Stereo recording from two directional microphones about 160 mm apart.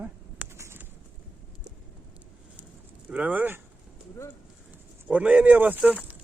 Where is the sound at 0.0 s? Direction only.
15° right (ahead or behind).